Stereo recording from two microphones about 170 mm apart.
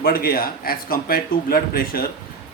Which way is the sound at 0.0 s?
60° left (ahead or behind).